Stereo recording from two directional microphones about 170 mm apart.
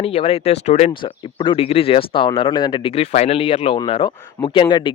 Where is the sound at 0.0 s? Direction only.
35° left (ahead or behind).